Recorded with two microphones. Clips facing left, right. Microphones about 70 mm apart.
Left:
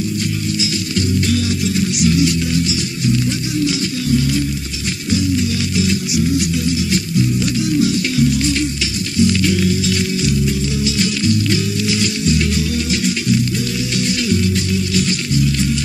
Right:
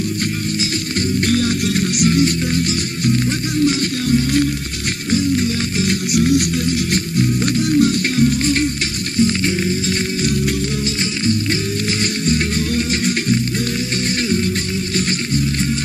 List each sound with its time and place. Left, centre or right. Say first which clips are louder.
0.9 s music: right 1 dB; right
3.6 s music: right 3 dB; right
9.2 s music: left 2 dB; right
12.3 s music: even; right
15.0 s music: right 1 dB; right